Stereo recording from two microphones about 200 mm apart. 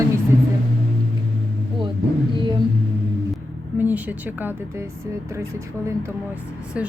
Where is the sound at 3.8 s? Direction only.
10° right (ahead or behind).